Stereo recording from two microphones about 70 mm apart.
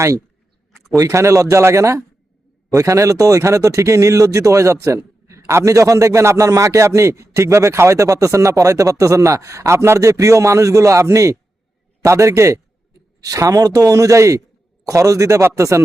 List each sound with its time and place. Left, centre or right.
0.9 s speech: right
13.2 s speech: right